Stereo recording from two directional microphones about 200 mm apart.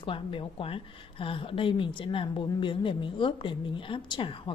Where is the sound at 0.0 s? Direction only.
25° left (ahead or behind).